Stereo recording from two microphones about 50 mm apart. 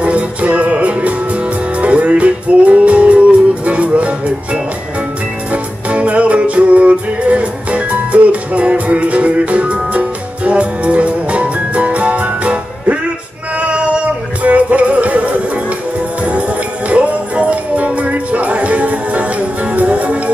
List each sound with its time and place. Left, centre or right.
0.0 s music: right